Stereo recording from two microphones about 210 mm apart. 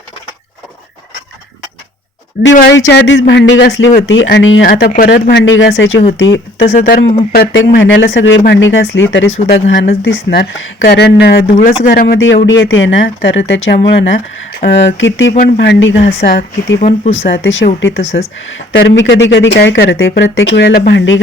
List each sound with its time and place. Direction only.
2.4 s speech: 55° left (ahead or behind)
6.7 s speech: 40° left (ahead or behind)
12.5 s speech: 65° left (ahead or behind)
15.3 s speech: 50° left (ahead or behind)
16.0 s speech: 45° left (ahead or behind)
17.1 s speech: 70° left (ahead or behind)
18.0 s speech: 30° left (ahead or behind)
18.3 s speech: 65° left (ahead or behind)